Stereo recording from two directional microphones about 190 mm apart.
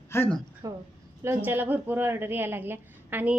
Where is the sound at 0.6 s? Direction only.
20° right (ahead or behind).